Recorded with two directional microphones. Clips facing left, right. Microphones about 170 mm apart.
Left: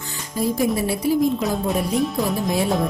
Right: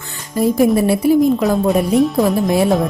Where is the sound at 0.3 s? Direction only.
60° right (ahead or behind).